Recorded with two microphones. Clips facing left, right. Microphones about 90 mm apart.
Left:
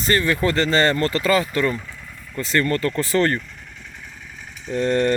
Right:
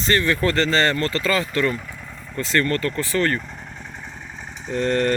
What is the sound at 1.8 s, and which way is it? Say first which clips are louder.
Vehicle: right 1 dB; 10° right (ahead or behind).